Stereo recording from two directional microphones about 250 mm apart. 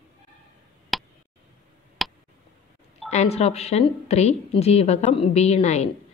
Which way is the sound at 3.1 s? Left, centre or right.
Left.